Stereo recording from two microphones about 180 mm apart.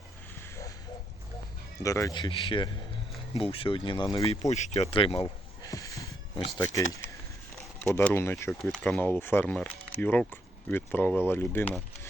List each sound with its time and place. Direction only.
1.8 s speech: 15° left (ahead or behind)
4.3 s speech: 40° left (ahead or behind)
5.6 s a sound: 20° left (ahead or behind)
6.7 s speech: 15° left (ahead or behind)